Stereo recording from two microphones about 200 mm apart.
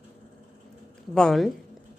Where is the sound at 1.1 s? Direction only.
5° left (ahead or behind).